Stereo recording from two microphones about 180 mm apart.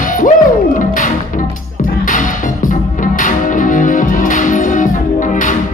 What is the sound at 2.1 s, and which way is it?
Music, 45° left (ahead or behind).